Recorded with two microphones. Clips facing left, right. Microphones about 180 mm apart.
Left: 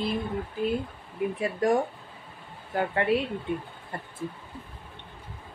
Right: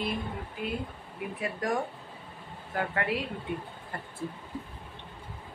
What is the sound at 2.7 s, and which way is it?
Speech, 25° left (ahead or behind).